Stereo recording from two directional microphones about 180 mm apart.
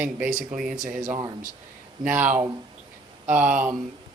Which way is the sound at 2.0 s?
10° right (ahead or behind).